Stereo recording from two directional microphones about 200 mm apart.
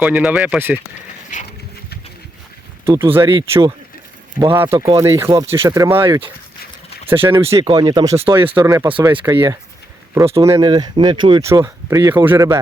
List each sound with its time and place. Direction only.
0.0 s speech: 5° right (ahead or behind)
2.8 s speech: 10° right (ahead or behind)
7.5 s speech: 20° right (ahead or behind)